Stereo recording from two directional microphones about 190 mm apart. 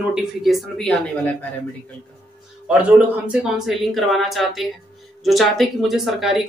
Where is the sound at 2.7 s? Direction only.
5° right (ahead or behind).